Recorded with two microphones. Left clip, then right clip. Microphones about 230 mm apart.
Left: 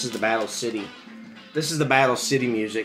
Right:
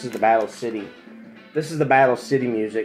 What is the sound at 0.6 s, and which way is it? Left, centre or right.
Speech, centre.